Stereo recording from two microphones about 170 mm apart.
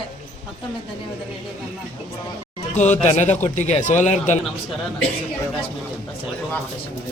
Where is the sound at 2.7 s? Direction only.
45° left (ahead or behind).